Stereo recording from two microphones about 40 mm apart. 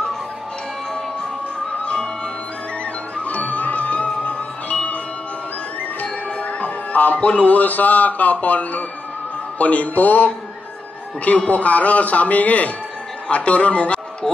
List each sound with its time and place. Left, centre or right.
2.8 s music: left
5.9 s a man's voice: left